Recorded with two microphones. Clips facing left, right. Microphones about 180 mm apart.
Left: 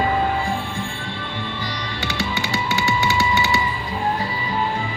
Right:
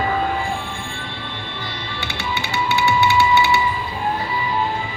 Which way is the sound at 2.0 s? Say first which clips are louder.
Left 2 dB; 40° left (ahead or behind).